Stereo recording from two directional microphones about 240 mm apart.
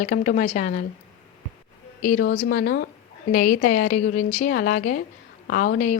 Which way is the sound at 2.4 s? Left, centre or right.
Left.